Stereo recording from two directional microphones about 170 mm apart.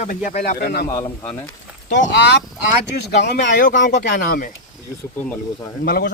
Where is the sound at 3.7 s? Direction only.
50° left (ahead or behind).